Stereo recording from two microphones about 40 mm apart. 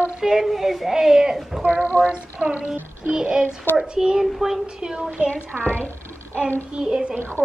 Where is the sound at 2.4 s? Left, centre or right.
Right.